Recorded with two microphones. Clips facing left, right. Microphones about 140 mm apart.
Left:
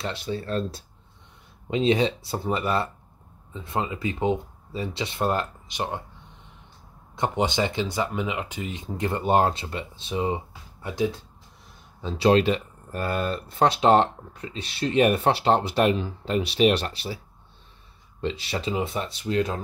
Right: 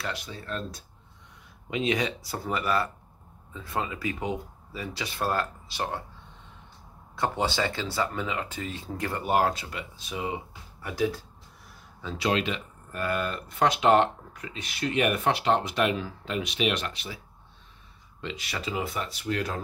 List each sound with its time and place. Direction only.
0.0 s speech: 30° left (ahead or behind)
7.2 s speech: 20° left (ahead or behind)
18.2 s speech: 30° left (ahead or behind)